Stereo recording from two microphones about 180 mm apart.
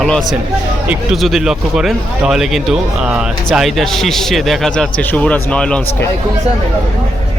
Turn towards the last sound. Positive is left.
turn(degrees=5)  # may be behind; listen again after turning